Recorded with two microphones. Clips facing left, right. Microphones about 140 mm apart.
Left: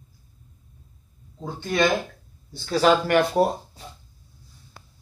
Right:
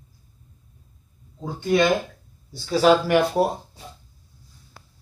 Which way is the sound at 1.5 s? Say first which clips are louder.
Right 3 dB; 15° right (ahead or behind).